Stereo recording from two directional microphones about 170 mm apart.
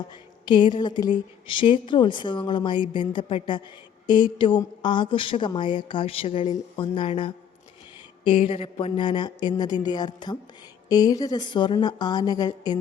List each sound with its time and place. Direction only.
0.4 s a woman's voice: 25° left (ahead or behind)